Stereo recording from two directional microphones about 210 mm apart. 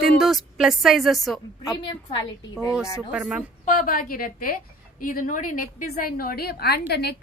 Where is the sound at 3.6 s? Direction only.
40° left (ahead or behind).